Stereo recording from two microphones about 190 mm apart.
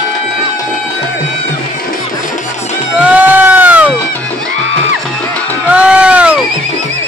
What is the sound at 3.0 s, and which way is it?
Sheep, 10° right (ahead or behind).